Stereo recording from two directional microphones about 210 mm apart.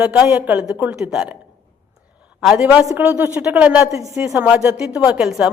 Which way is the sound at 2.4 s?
5° right (ahead or behind).